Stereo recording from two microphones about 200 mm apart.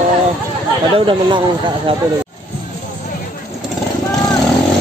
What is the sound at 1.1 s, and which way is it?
Speech, 25° right (ahead or behind).